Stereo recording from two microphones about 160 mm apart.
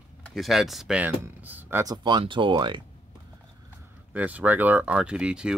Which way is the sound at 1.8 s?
25° right (ahead or behind).